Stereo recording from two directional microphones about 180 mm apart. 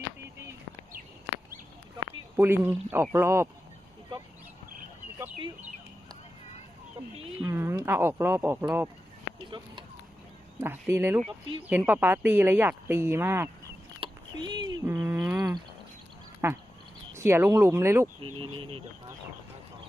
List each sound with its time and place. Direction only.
2.3 s speech: 10° right (ahead or behind)
7.5 s speech: 15° right (ahead or behind)
10.6 s speech: 15° right (ahead or behind)
14.0 s a sound: 25° right (ahead or behind)
14.8 s insect: 10° right (ahead or behind)
15.4 s a sound: 20° right (ahead or behind)
16.4 s speech: 15° right (ahead or behind)
18.2 s speech: 30° right (ahead or behind)